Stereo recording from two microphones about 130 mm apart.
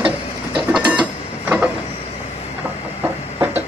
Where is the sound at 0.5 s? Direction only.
10° right (ahead or behind).